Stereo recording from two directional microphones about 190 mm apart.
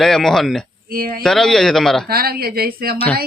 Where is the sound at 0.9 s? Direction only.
50° right (ahead or behind).